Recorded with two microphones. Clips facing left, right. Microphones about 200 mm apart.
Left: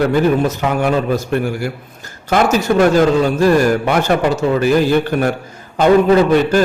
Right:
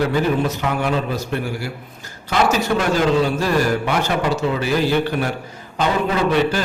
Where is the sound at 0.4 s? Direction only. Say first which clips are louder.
Left 5 dB; 50° left (ahead or behind).